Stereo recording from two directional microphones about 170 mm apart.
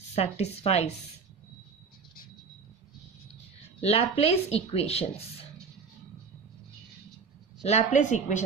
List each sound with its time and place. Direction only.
0.1 s speech: 40° left (ahead or behind)
3.8 s speech: 35° left (ahead or behind)
7.6 s a woman's voice: 45° left (ahead or behind)